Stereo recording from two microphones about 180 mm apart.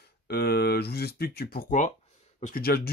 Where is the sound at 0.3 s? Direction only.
60° left (ahead or behind).